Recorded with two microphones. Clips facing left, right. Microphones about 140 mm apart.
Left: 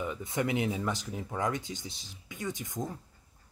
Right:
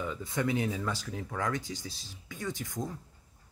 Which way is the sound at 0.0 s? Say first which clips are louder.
Even; 20° left (ahead or behind).